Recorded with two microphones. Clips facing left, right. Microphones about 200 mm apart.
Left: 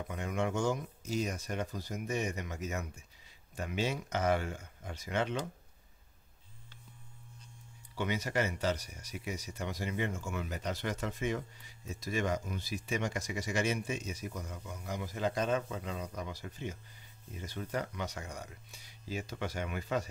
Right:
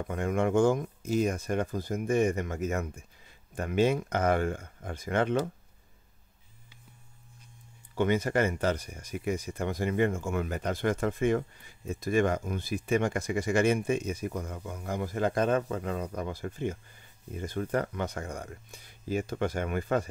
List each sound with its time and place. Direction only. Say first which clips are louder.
0.1 s speech: right 8 dB; 50° right (ahead or behind)
7.9 s speech: right 8 dB; 50° right (ahead or behind)